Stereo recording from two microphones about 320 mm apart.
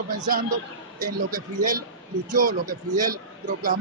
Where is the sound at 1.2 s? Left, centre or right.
Right.